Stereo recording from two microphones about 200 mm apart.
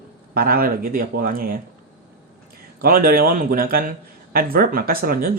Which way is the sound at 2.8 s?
45° right (ahead or behind).